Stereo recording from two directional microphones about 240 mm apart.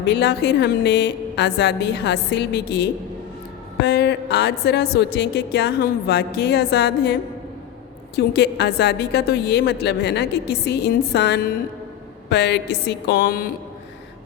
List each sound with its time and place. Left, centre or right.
0.0 s a woman's voice: left